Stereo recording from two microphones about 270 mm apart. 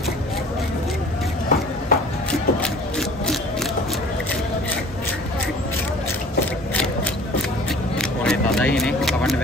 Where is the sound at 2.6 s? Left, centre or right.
Centre.